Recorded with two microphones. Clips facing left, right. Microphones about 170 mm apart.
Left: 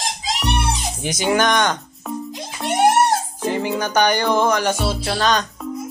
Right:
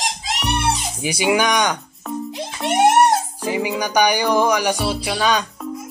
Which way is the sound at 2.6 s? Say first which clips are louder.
Right 1 dB; 25° right (ahead or behind).